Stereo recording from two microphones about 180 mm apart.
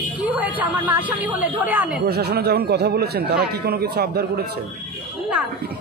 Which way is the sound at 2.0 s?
60° right (ahead or behind).